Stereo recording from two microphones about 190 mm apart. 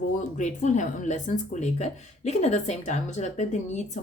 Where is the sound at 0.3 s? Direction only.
40° left (ahead or behind).